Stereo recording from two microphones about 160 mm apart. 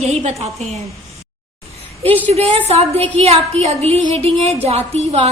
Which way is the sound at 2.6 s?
40° right (ahead or behind).